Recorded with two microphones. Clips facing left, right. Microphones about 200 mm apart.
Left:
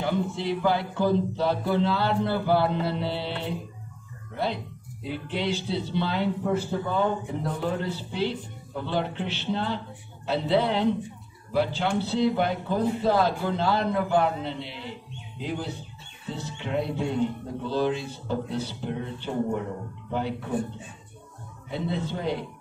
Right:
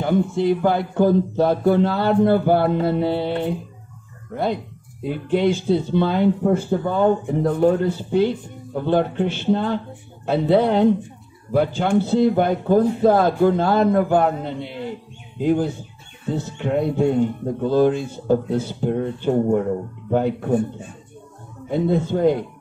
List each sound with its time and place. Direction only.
0.0 s a man's voice: 50° right (ahead or behind)
5.0 s a man's voice: 50° right (ahead or behind)